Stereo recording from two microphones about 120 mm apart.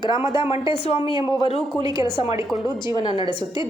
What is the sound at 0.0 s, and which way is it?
Speech, 40° left (ahead or behind).